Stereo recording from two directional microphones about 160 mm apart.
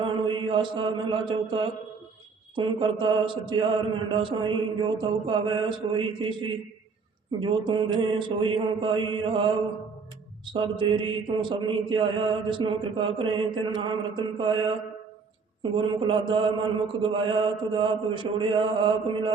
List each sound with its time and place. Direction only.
0.0 s mantra: 30° right (ahead or behind)
2.6 s a man's voice: 30° right (ahead or behind)
15.7 s a man's voice: 30° right (ahead or behind)